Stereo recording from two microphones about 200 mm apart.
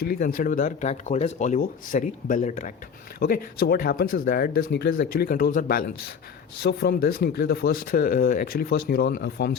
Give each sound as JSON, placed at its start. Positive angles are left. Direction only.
{"t": 0.0, "sound": "speech", "side_deg": 45}